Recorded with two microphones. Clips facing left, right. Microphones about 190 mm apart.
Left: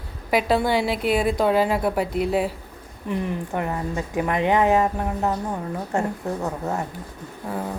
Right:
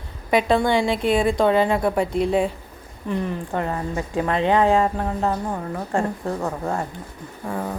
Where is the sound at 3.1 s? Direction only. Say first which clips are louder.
Right 1 dB; 15° left (ahead or behind).